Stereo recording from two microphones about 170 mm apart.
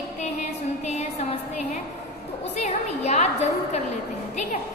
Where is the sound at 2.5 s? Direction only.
40° left (ahead or behind).